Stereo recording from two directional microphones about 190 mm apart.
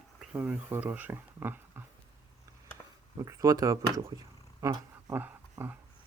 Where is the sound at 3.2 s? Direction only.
15° right (ahead or behind).